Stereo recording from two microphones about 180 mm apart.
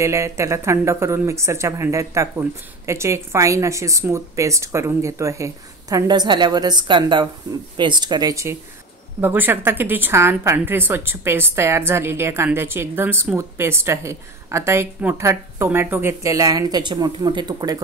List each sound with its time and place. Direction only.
0.0 s a woman's voice: 15° right (ahead or behind)